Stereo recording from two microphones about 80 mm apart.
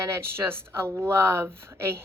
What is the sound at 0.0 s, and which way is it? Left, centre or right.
Speech, right.